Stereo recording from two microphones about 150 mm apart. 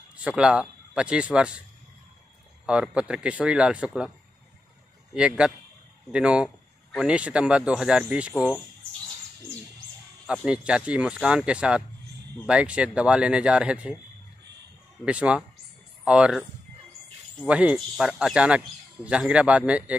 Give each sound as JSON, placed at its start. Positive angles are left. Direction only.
{"t": 0.1, "sound": "a man's voice", "side_deg": -10}
{"t": 2.6, "sound": "speech", "side_deg": -5}
{"t": 5.1, "sound": "speech", "side_deg": -5}
{"t": 10.2, "sound": "speech", "side_deg": -5}
{"t": 15.0, "sound": "speech", "side_deg": -5}
{"t": 17.5, "sound": "speech", "side_deg": -10}